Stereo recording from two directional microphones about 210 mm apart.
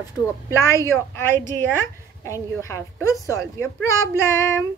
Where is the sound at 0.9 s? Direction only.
10° left (ahead or behind).